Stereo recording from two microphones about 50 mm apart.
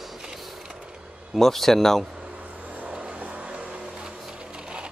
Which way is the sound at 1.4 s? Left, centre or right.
Centre.